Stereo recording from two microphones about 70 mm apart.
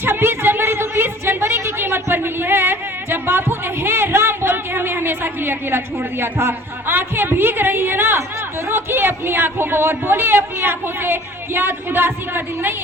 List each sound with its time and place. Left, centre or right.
0.0 s a woman's voice: right